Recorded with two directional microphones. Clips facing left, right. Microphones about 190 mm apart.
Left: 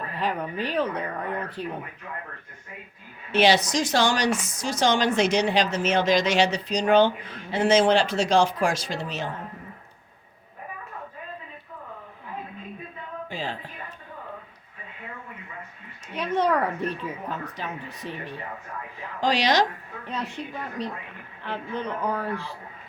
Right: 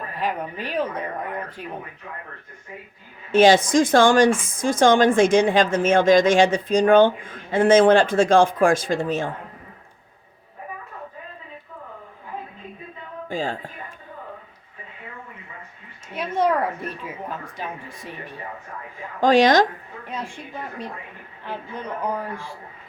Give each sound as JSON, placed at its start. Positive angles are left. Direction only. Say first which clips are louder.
{"t": 0.1, "sound": "speech", "louder": "right 1 dB", "side_deg": -10}
{"t": 3.3, "sound": "speech", "louder": "right 6 dB", "side_deg": -45}
{"t": 13.2, "sound": "a woman's voice", "louder": "right 7 dB", "side_deg": -45}
{"t": 16.1, "sound": "speech", "louder": "right 2 dB", "side_deg": -10}
{"t": 19.2, "sound": "speech", "louder": "right 7 dB", "side_deg": -50}
{"t": 20.1, "sound": "speech", "louder": "left 1 dB", "side_deg": -10}